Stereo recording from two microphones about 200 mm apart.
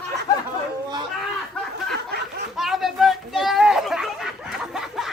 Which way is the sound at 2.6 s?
Centre (ahead or behind).